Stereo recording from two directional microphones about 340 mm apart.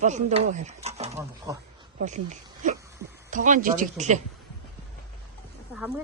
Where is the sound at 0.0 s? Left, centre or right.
Right.